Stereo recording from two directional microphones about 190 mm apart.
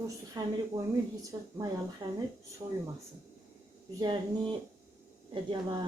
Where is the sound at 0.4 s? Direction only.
20° right (ahead or behind).